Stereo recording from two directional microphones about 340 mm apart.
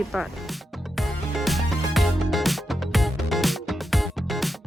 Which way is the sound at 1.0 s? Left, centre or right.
Centre.